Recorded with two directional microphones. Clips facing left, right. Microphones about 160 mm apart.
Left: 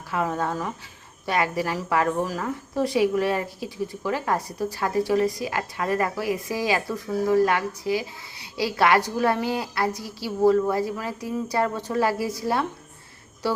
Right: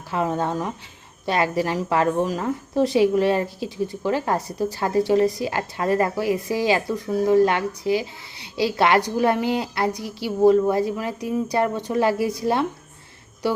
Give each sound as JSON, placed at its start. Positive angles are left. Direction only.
{"t": 0.1, "sound": "a woman's voice", "side_deg": -25}